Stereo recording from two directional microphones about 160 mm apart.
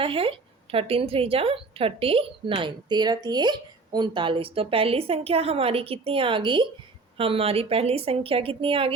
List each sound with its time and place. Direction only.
0.0 s a woman's voice: 35° right (ahead or behind)